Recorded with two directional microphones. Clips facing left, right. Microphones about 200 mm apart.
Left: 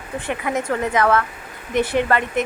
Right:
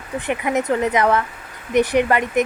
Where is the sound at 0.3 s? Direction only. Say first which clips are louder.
Right 3 dB; 20° right (ahead or behind).